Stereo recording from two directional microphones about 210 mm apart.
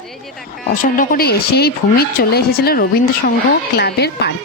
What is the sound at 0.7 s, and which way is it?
Speech, 40° left (ahead or behind).